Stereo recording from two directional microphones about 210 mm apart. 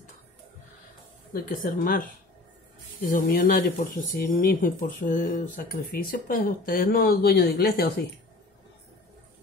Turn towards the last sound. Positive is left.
turn(degrees=45)  # may be behind; listen again after turning